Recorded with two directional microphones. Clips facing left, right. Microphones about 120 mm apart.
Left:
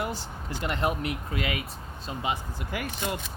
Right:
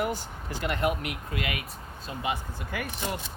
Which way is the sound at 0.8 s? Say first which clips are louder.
Left 1 dB; 30° left (ahead or behind).